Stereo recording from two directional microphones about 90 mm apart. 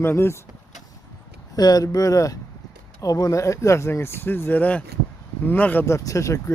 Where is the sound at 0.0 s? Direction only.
30° left (ahead or behind).